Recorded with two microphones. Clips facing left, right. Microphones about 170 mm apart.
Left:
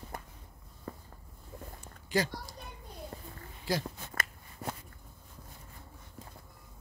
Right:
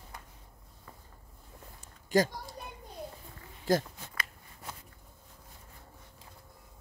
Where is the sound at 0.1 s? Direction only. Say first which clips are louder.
Left 6 dB; 50° left (ahead or behind).